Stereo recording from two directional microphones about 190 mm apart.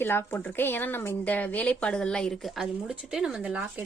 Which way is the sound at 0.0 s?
10° left (ahead or behind).